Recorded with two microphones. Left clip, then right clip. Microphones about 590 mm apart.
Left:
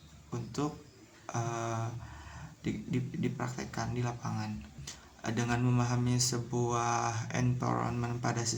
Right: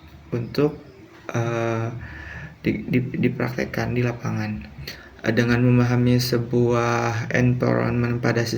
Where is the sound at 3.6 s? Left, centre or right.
Left.